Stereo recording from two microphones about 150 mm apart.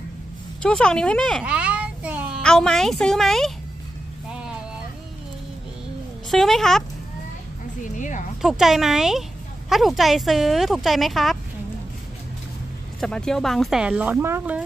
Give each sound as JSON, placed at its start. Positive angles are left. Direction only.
{"t": 0.6, "sound": "speech", "side_deg": 5}
{"t": 1.4, "sound": "child singing", "side_deg": -10}
{"t": 2.4, "sound": "speech", "side_deg": 5}
{"t": 4.3, "sound": "vehicle", "side_deg": -5}
{"t": 6.3, "sound": "speech", "side_deg": 0}
{"t": 7.8, "sound": "a sound", "side_deg": 55}
{"t": 8.4, "sound": "speech", "side_deg": 0}
{"t": 13.0, "sound": "speech", "side_deg": 5}